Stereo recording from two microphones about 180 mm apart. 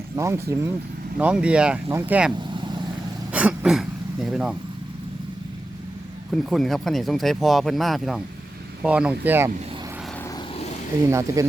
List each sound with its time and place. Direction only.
0.2 s speech: 15° right (ahead or behind)
2.5 s vehicle: 25° right (ahead or behind)
3.3 s a sound: 5° right (ahead or behind)
6.3 s speech: centre (ahead or behind)
11.1 s speech: 15° right (ahead or behind)